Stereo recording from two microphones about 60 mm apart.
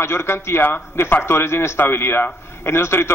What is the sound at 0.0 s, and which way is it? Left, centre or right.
A man's voice, left.